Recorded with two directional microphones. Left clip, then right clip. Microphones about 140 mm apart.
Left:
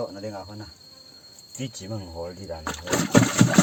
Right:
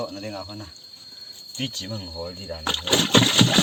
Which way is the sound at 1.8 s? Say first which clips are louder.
Right 4 dB; 30° left (ahead or behind).